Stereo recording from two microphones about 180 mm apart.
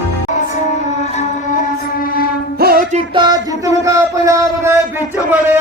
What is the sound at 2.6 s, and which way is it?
Music, 55° right (ahead or behind).